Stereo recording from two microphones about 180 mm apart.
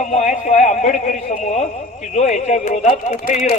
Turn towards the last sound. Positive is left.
turn(degrees=45)  # may be behind; listen again after turning